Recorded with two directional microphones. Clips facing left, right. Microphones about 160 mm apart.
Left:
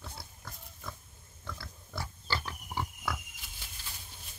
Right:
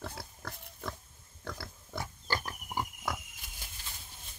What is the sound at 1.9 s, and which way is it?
Pig, 15° right (ahead or behind).